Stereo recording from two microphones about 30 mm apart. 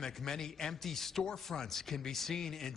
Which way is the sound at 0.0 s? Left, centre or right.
Centre.